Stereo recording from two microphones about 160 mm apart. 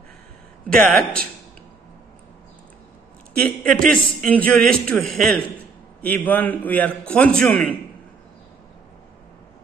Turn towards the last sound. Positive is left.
turn(degrees=5)  # may be behind; listen again after turning